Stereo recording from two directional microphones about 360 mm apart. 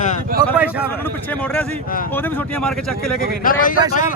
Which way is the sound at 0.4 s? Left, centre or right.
Centre.